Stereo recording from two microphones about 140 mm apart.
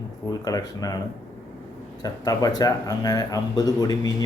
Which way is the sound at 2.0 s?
25° left (ahead or behind).